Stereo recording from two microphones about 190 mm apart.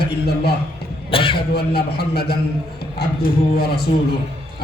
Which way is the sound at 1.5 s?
55° left (ahead or behind).